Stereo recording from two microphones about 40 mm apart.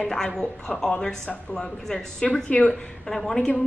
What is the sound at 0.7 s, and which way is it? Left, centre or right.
A woman's voice, centre.